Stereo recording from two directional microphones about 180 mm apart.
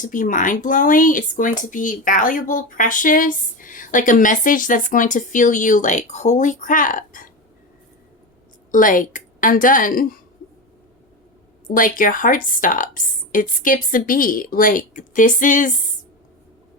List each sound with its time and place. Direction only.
0.0 s speech: 45° left (ahead or behind)
8.7 s speech: 50° left (ahead or behind)
11.7 s speech: 50° left (ahead or behind)